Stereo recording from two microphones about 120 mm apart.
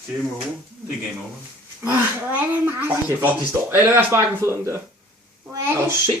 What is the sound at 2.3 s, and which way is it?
Speech, 15° right (ahead or behind).